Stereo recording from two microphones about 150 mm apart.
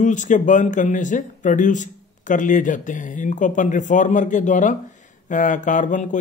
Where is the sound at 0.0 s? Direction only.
55° left (ahead or behind).